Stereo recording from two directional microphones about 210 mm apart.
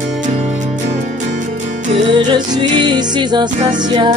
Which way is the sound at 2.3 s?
20° right (ahead or behind).